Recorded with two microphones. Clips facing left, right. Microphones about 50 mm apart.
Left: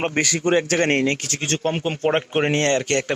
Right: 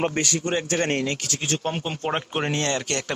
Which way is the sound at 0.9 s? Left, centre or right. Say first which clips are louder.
Left 5 dB; left.